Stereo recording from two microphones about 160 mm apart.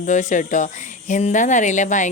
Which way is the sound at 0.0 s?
50° left (ahead or behind).